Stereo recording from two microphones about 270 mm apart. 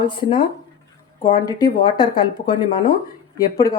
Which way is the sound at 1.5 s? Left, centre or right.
Centre.